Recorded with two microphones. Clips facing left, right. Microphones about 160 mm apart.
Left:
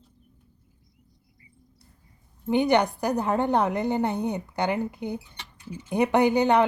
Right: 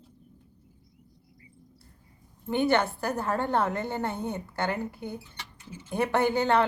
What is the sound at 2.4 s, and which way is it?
A woman's voice, 15° left (ahead or behind).